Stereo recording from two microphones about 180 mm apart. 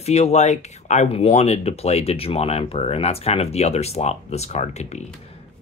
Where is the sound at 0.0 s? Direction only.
35° left (ahead or behind).